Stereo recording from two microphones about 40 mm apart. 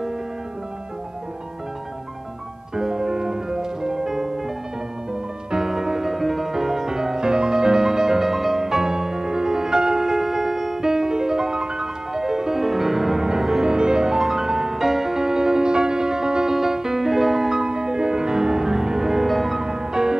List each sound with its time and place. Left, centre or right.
2.7 s music: centre
5.5 s music: centre
13.7 s music: centre
19.6 s music: centre